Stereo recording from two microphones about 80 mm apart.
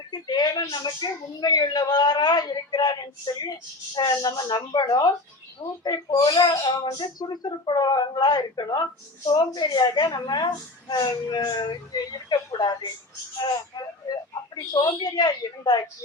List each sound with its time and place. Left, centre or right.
0.1 s speech: left
11.1 s speech: left
11.6 s speech: left
14.1 s a woman's voice: left